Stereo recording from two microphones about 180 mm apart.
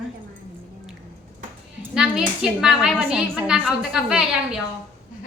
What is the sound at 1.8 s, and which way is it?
A woman's voice, 5° right (ahead or behind).